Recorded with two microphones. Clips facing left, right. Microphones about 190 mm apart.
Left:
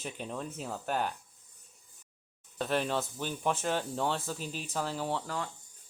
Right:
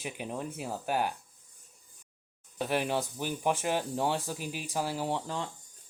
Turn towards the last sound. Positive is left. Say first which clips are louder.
# right 1 dB
turn(degrees=-15)  # may be behind; listen again after turning